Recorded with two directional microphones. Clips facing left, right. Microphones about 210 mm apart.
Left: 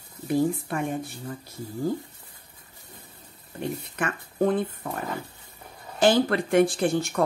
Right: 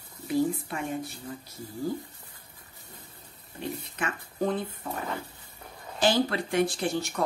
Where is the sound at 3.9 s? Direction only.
50° left (ahead or behind).